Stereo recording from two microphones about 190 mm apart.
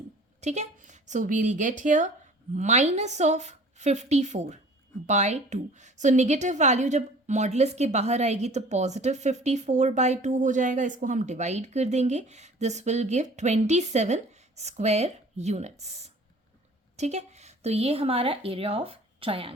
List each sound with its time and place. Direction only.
0.4 s a woman's voice: 40° right (ahead or behind)